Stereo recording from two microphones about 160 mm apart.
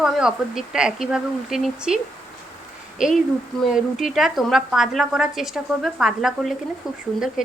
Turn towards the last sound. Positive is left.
turn(degrees=-5)  # may be behind; listen again after turning